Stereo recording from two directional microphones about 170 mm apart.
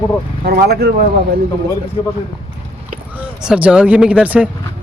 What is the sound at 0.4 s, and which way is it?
Speech, 70° right (ahead or behind).